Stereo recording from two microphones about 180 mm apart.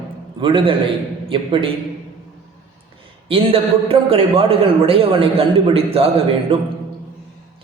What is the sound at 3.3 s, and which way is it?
A man's voice, 30° right (ahead or behind).